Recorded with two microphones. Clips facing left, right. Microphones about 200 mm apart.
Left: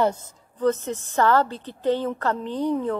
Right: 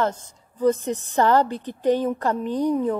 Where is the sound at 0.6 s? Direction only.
15° right (ahead or behind).